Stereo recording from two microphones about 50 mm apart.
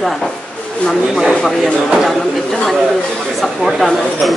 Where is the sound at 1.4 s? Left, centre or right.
Centre.